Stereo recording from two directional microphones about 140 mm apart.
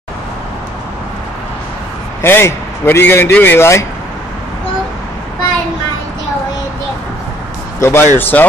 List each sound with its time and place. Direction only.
2.2 s a man's voice: 15° left (ahead or behind)
7.8 s a man's voice: 15° left (ahead or behind)